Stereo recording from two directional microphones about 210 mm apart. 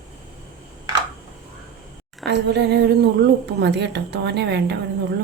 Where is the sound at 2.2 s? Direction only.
55° right (ahead or behind).